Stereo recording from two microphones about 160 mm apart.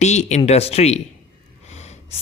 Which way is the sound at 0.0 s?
45° left (ahead or behind).